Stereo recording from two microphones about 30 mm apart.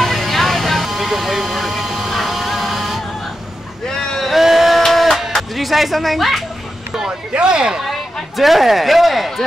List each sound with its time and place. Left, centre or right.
0.0 s vehicle: centre
3.9 s a sound: centre
4.2 s a sound: centre
4.8 s music: centre
5.6 s speech: centre
7.3 s speech: right
7.8 s speech: centre